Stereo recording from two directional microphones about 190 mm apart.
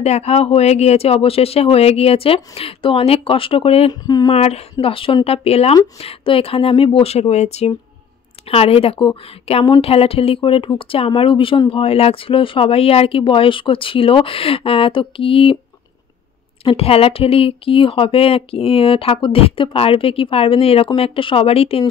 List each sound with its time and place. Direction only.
0.0 s speech: 35° left (ahead or behind)
4.0 s speech: 20° left (ahead or behind)
4.3 s speech: 35° left (ahead or behind)
16.6 s speech: 30° left (ahead or behind)